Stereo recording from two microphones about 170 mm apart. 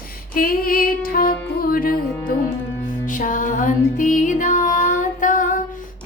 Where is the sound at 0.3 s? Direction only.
60° left (ahead or behind).